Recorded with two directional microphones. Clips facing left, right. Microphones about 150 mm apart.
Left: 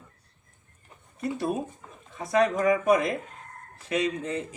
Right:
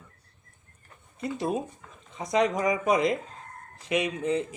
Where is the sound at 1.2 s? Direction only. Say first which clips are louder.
Left 1 dB; 20° right (ahead or behind).